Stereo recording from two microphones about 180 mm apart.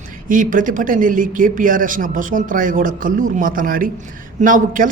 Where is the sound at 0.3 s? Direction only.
45° right (ahead or behind).